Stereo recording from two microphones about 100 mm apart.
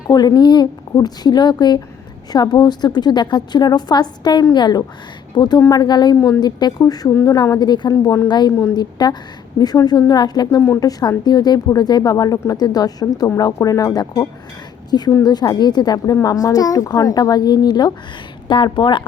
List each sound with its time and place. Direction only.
0.1 s a woman's voice: 45° left (ahead or behind)
5.5 s a woman's voice: 35° left (ahead or behind)
6.1 s a woman's voice: 25° left (ahead or behind)
6.4 s a woman's voice: 45° left (ahead or behind)
7.6 s a woman's voice: 45° left (ahead or behind)
8.3 s a woman's voice: 45° left (ahead or behind)